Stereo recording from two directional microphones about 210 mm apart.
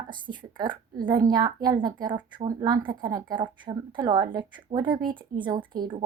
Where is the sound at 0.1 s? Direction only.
20° right (ahead or behind).